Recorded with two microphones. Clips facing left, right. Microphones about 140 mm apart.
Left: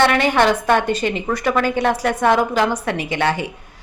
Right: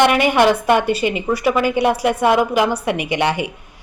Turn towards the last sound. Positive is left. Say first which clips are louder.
# right 1 dB
turn(degrees=-15)  # may be behind; listen again after turning